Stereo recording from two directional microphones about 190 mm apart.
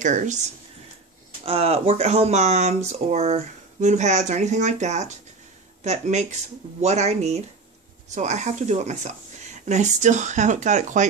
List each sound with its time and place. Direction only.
0.0 s speech: 40° right (ahead or behind)
1.4 s speech: 30° right (ahead or behind)